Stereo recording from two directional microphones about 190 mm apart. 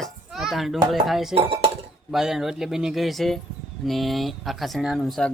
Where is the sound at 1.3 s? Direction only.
30° right (ahead or behind).